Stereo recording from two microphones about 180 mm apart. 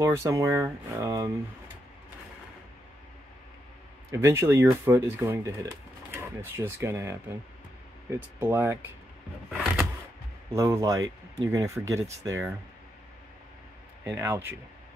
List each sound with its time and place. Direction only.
0.0 s speech: 15° right (ahead or behind)
4.1 s speech: 15° right (ahead or behind)
9.5 s a sound: centre (ahead or behind)
10.5 s speech: 15° right (ahead or behind)
14.0 s speech: 15° right (ahead or behind)